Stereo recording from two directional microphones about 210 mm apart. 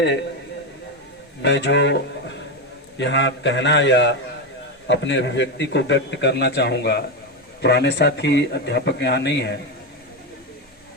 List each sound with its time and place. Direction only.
1.4 s a man's voice: 55° left (ahead or behind)